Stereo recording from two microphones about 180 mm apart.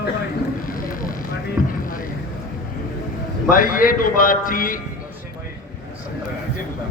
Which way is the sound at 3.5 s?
50° left (ahead or behind).